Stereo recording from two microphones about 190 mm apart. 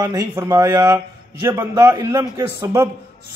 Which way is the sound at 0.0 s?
15° right (ahead or behind).